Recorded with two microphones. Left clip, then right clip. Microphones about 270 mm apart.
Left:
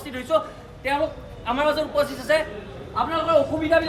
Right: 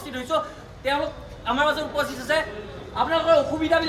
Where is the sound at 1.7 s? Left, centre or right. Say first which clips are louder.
Left 2 dB; left.